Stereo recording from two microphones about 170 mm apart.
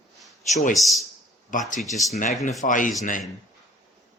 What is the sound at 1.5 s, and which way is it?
Speech, 50° left (ahead or behind).